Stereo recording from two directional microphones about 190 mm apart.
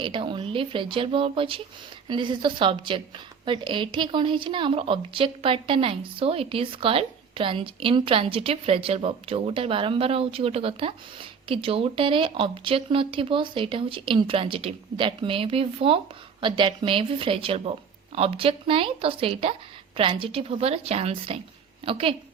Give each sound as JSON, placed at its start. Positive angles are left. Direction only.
{"t": 0.0, "sound": "a woman's voice", "side_deg": -25}